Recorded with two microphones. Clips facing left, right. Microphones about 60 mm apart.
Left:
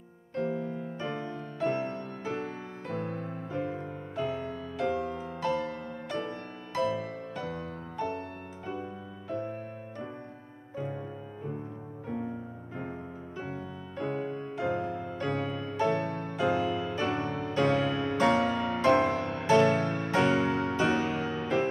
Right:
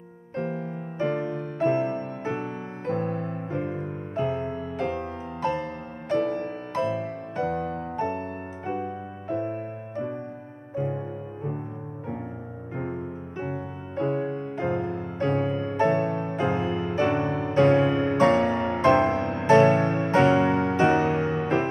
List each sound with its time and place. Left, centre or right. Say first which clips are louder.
0.4 s music: right 1 dB; right
13.4 s music: right 6 dB; right